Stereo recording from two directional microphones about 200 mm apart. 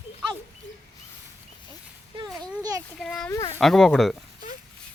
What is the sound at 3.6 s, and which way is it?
Speech, centre (ahead or behind).